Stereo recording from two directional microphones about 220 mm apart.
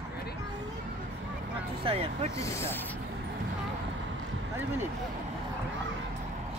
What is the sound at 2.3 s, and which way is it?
Speech, 15° left (ahead or behind).